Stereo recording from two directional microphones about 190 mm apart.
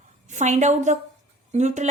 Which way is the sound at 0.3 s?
40° right (ahead or behind).